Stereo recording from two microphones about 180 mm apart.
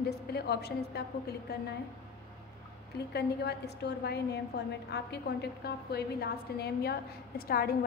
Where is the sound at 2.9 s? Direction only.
65° left (ahead or behind).